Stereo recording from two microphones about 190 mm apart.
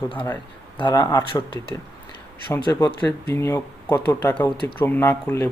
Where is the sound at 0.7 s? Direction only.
20° left (ahead or behind).